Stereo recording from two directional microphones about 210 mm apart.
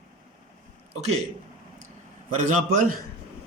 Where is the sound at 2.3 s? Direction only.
40° right (ahead or behind).